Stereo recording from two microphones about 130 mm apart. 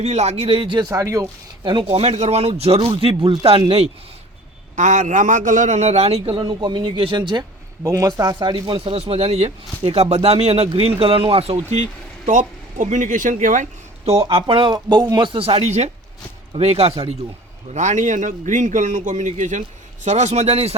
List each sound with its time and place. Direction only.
0.0 s speech: 55° right (ahead or behind); by 0.9 s 40° right (ahead or behind)
0.9 s speech: 25° right (ahead or behind)
1.6 s speech: 45° right (ahead or behind)
4.8 s a man's voice: 70° right (ahead or behind); by 6.4 s 50° right (ahead or behind)
6.4 s speech: 35° right (ahead or behind)
11.7 s speech: 70° right (ahead or behind)
14.3 s speech: 45° right (ahead or behind)
17.7 s a man's voice: 70° right (ahead or behind)